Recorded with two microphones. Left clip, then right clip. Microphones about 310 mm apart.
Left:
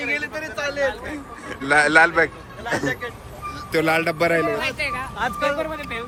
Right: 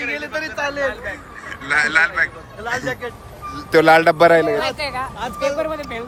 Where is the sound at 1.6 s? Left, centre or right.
Centre.